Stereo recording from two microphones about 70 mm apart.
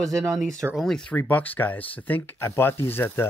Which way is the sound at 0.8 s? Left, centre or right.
Centre.